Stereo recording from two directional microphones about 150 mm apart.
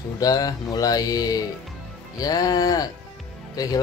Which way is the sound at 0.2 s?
25° left (ahead or behind).